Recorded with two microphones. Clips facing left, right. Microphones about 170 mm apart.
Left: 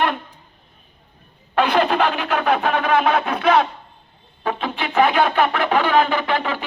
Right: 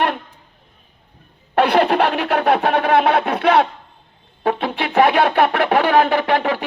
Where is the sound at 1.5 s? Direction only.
70° right (ahead or behind).